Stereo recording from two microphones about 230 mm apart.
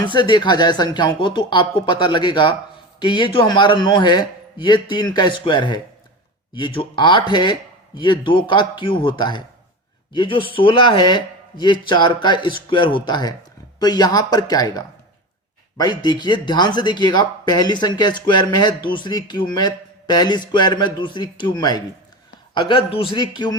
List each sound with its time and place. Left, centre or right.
0.0 s speech: centre